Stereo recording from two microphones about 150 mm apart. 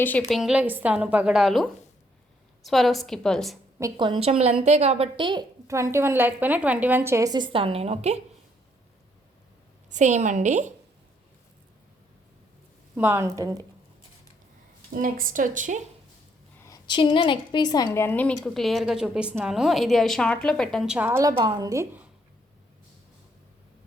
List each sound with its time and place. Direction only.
0.2 s a woman's voice: centre (ahead or behind)
3.8 s a woman's voice: 25° right (ahead or behind)
5.6 s a woman's voice: 20° right (ahead or behind); by 8.2 s 45° right (ahead or behind)
9.9 s a woman's voice: 55° right (ahead or behind)
13.0 s a woman's voice: 15° right (ahead or behind)
14.9 s a woman's voice: 65° right (ahead or behind)
16.6 s a woman's voice: 25° left (ahead or behind)
18.0 s a woman's voice: 10° left (ahead or behind); by 21.1 s 5° right (ahead or behind)
21.1 s a woman's voice: 20° right (ahead or behind)